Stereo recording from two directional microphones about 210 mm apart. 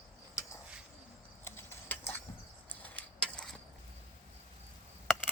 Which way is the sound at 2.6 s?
10° left (ahead or behind).